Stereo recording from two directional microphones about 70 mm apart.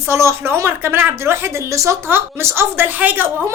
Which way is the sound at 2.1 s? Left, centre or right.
Right.